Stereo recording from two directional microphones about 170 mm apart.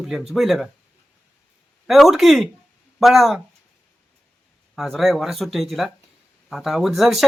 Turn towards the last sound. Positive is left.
turn(degrees=0)  # may be behind; listen again after turning